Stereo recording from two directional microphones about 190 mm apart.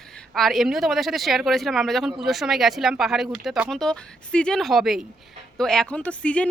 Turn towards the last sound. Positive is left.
turn(degrees=5)  # may be behind; listen again after turning